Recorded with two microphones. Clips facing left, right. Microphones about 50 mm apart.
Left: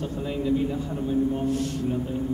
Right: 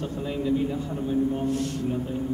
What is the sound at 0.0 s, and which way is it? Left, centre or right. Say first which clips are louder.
A man's voice: even; centre.